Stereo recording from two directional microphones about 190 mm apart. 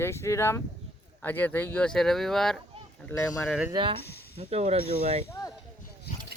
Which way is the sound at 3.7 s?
25° right (ahead or behind).